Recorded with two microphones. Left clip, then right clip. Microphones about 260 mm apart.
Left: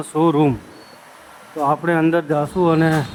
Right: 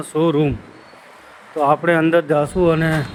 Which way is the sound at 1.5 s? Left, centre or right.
Centre.